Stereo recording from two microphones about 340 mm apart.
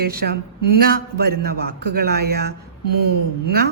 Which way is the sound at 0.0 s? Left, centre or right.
Right.